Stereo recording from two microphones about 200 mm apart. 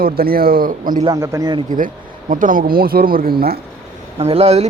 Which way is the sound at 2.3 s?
40° right (ahead or behind).